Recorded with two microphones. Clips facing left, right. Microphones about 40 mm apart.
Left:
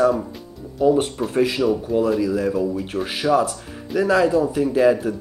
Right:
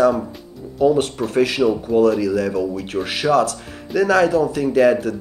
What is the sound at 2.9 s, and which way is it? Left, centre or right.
Speech, centre.